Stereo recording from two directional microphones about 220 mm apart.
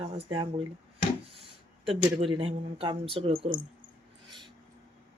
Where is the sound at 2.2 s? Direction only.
25° right (ahead or behind).